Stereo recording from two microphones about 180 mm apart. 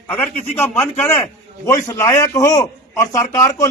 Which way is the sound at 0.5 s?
10° left (ahead or behind).